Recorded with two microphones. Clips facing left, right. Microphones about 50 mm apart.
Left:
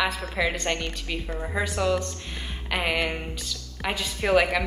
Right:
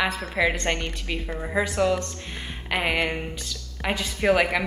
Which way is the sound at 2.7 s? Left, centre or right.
Centre.